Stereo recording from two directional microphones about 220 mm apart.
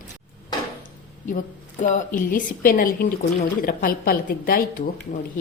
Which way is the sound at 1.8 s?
35° left (ahead or behind).